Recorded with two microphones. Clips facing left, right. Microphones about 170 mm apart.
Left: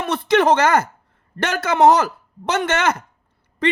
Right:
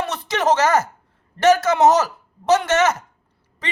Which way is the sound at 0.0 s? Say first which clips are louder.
Left 5 dB; 55° left (ahead or behind).